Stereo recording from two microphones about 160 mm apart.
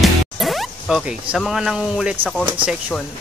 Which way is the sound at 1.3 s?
Centre (ahead or behind).